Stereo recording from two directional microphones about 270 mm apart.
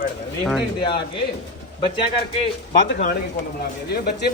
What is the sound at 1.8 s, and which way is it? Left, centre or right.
Speech, centre.